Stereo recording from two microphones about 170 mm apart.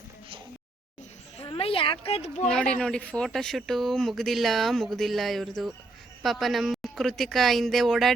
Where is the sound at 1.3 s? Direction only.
35° left (ahead or behind).